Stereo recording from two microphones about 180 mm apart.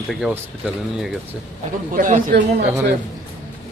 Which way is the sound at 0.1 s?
Centre (ahead or behind).